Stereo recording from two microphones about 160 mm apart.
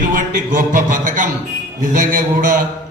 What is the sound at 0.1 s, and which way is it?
Mantra, 55° right (ahead or behind).